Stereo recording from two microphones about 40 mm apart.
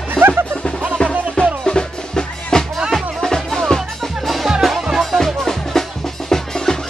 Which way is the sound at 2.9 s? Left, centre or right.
Centre.